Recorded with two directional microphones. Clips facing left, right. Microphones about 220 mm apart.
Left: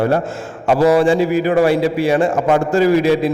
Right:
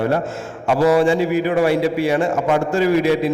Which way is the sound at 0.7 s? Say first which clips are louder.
Left 2 dB; 35° left (ahead or behind).